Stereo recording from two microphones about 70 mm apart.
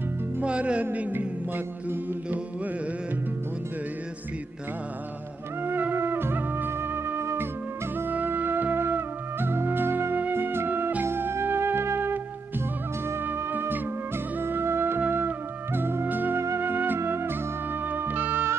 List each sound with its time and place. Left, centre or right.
0.4 s music: centre
1.1 s music: right
5.6 s music: right